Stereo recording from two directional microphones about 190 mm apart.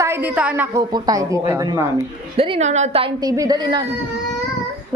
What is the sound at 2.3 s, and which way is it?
Speech, 30° right (ahead or behind).